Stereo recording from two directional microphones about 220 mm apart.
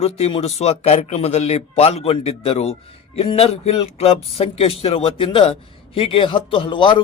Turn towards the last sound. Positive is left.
turn(degrees=20)  # may be behind; listen again after turning